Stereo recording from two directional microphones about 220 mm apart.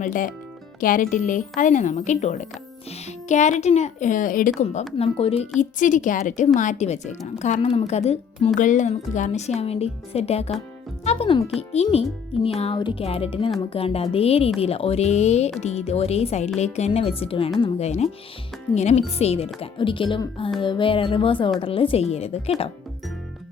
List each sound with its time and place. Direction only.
0.0 s a woman's voice: 35° left (ahead or behind)